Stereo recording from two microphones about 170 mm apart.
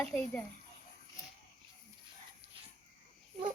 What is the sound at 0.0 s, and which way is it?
Speech, 5° left (ahead or behind).